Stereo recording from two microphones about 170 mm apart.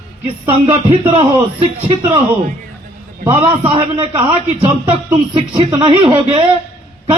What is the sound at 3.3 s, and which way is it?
A man's voice, 35° right (ahead or behind).